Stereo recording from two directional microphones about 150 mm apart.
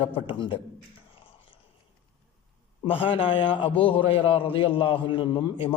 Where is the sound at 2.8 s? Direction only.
35° left (ahead or behind).